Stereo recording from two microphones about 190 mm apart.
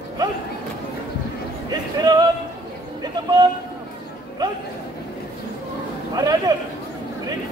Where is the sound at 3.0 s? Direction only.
20° right (ahead or behind).